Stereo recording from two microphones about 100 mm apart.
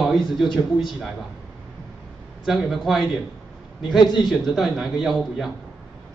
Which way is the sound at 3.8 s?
50° left (ahead or behind).